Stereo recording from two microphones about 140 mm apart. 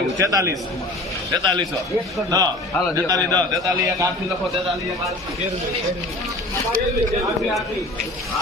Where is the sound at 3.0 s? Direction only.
25° right (ahead or behind).